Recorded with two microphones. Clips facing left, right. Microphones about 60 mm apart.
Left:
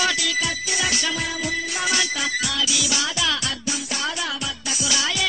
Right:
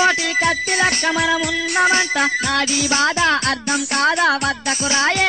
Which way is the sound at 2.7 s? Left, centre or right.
Right.